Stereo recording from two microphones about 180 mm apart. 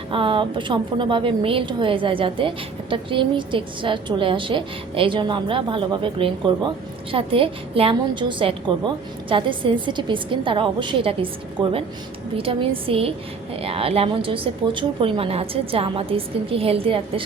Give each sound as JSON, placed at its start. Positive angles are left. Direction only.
{"t": 0.1, "sound": "a woman's voice", "side_deg": -30}